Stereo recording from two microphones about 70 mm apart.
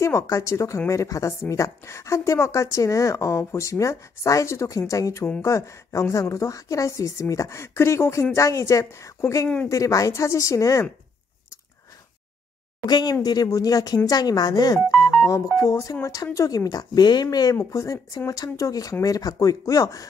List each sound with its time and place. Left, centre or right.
0.0 s a woman's voice: left
12.8 s speech: left
15.5 s speech: left
17.6 s speech: left